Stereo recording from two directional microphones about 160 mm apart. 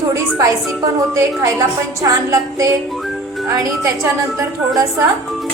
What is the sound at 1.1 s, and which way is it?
A woman's voice, 20° right (ahead or behind).